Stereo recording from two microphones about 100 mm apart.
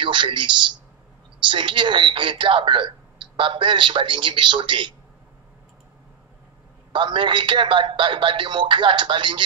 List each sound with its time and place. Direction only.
0.0 s a woman's voice: 50° right (ahead or behind)
6.9 s a man's voice: 55° right (ahead or behind)